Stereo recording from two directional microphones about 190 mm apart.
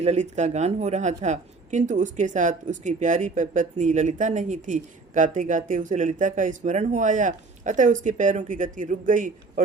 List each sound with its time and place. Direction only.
0.0 s a woman's voice: 35° right (ahead or behind)